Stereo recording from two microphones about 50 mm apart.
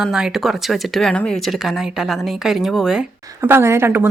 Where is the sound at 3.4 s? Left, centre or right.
Right.